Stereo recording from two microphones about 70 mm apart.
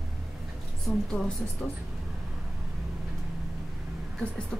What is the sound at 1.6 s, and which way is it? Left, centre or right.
Speech, centre.